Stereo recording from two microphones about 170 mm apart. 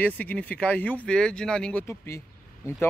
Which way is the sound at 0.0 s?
10° left (ahead or behind).